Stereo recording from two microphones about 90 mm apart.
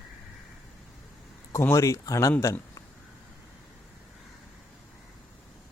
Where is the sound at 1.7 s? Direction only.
35° left (ahead or behind).